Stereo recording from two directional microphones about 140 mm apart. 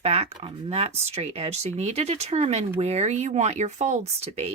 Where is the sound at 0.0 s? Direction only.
45° right (ahead or behind).